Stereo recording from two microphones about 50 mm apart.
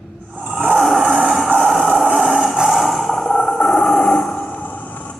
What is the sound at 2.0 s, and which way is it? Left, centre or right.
Vehicle, centre.